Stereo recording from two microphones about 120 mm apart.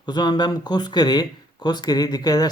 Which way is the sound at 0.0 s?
35° left (ahead or behind).